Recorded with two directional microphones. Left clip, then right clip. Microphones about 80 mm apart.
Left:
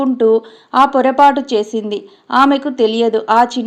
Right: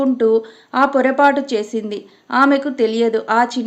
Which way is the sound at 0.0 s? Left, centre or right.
Centre.